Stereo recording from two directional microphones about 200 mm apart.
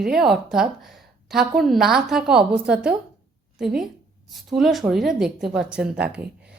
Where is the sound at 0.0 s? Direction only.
Centre (ahead or behind).